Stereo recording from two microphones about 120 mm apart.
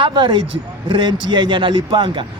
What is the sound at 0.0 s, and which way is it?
Speech, 40° right (ahead or behind).